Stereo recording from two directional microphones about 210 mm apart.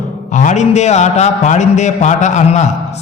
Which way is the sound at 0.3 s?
35° left (ahead or behind).